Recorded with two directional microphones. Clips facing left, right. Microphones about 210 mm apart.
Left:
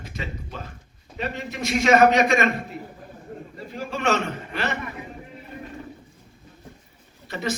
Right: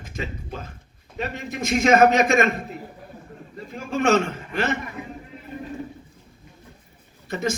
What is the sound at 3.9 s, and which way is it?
Speech, 45° right (ahead or behind).